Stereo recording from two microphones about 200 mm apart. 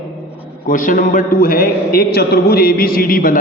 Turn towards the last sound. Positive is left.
turn(degrees=45)  # may be behind; listen again after turning